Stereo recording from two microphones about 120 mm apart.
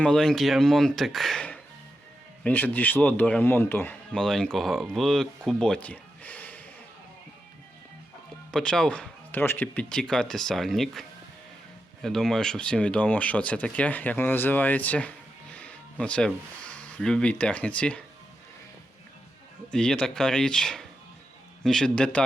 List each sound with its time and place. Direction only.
0.0 s speech: 5° left (ahead or behind)
4.1 s speech: 5° left (ahead or behind)
8.5 s speech: 5° left (ahead or behind)
12.0 s speech: 5° left (ahead or behind)
19.7 s speech: 5° left (ahead or behind)